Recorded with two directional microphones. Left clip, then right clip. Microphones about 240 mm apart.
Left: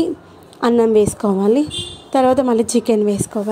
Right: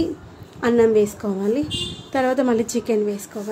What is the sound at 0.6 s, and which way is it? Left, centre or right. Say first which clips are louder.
A woman's voice: left 3 dB; left.